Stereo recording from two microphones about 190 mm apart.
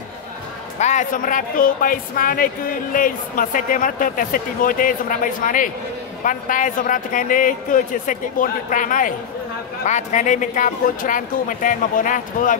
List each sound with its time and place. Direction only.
0.7 s speech: 40° left (ahead or behind)